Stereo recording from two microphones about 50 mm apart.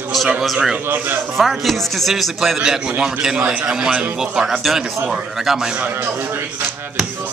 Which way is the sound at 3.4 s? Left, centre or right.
Right.